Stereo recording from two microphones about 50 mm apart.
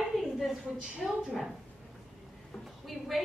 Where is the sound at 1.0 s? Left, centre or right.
Centre.